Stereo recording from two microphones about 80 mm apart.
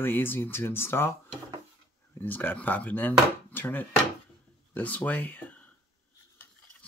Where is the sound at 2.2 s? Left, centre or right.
Left.